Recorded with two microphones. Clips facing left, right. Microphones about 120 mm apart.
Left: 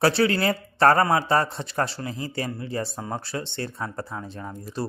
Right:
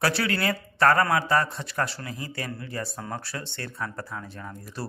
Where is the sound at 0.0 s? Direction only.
25° left (ahead or behind).